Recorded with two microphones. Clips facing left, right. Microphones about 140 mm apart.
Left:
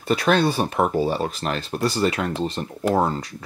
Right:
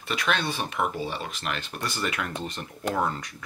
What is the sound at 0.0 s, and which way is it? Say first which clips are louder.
Speech: left 9 dB; 35° left (ahead or behind).